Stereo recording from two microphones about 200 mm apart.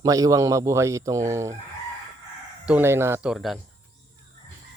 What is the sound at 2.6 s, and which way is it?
Speech, 10° right (ahead or behind).